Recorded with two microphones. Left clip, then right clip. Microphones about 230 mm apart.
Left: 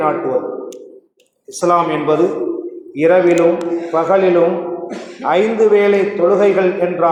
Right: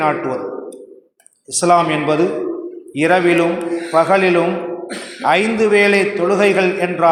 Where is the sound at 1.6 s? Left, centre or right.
Right.